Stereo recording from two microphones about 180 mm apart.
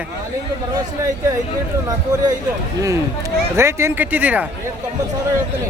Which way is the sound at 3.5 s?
15° right (ahead or behind).